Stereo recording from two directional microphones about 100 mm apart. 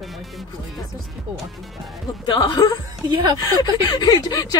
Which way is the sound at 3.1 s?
50° right (ahead or behind).